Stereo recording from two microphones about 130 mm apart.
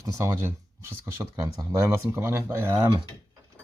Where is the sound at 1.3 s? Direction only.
30° right (ahead or behind).